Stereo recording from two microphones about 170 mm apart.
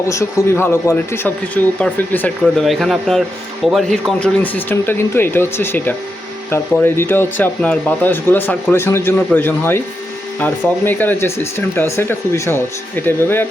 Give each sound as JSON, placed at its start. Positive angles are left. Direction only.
{"t": 0.1, "sound": "speech", "side_deg": 15}